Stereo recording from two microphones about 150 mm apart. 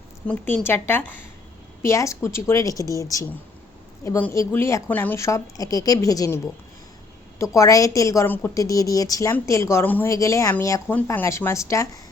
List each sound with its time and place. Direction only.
0.3 s a woman's voice: 10° left (ahead or behind)